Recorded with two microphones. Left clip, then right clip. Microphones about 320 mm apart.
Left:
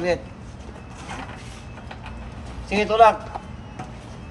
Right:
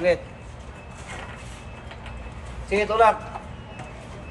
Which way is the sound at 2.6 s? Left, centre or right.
Left.